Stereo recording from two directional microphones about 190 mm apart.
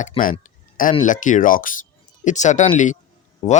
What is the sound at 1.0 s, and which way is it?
Speech, 40° left (ahead or behind).